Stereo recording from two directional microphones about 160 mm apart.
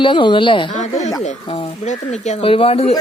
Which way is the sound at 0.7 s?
45° left (ahead or behind).